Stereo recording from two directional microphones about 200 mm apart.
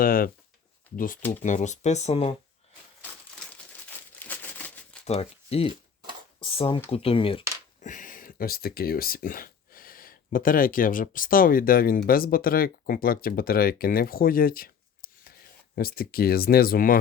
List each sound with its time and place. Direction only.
0.0 s speech: 45° left (ahead or behind)
3.8 s crumpling: 10° left (ahead or behind)
5.0 s speech: 30° left (ahead or behind)
7.8 s speech: 40° left (ahead or behind)